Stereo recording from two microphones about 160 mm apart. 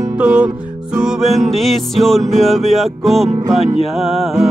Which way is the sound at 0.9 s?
Centre (ahead or behind).